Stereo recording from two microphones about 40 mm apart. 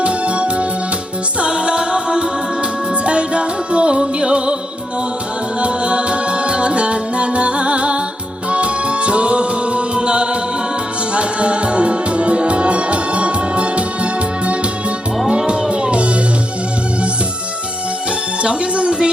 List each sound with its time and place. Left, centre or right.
0.0 s music: right
5.5 s music: right
18.4 s music: right